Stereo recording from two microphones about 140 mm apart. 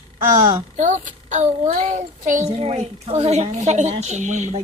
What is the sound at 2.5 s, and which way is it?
A woman's voice, 50° right (ahead or behind).